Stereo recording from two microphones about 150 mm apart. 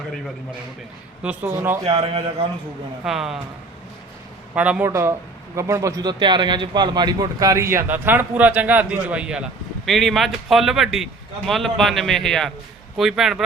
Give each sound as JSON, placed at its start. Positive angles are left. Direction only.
{"t": 1.2, "sound": "speech", "side_deg": -10}
{"t": 2.0, "sound": "a man's voice", "side_deg": -35}
{"t": 3.0, "sound": "speech", "side_deg": 0}
{"t": 4.5, "sound": "a man's voice", "side_deg": -10}